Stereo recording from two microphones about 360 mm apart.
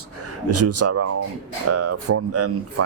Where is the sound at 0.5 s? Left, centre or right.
Right.